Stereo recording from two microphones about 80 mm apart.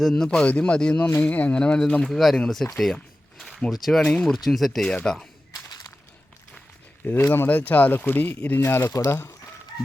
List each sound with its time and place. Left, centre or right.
0.0 s speech: centre
4.1 s speech: centre
4.4 s speech: centre
5.6 s a sound: left
7.1 s speech: left